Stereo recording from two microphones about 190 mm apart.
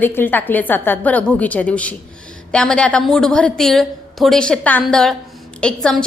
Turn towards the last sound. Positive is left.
turn(degrees=5)  # may be behind; listen again after turning